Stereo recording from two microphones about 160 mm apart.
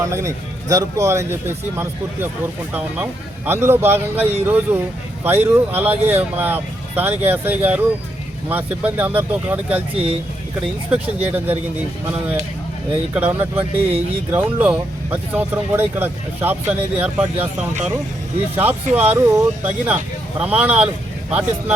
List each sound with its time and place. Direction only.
0.0 s speech: 20° right (ahead or behind)
13.1 s speech: 10° right (ahead or behind)
17.4 s speech: 45° right (ahead or behind)
18.5 s speech: 10° right (ahead or behind)